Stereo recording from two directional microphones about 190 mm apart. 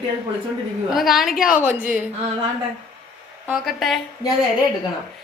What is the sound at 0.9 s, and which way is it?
Speech, centre (ahead or behind).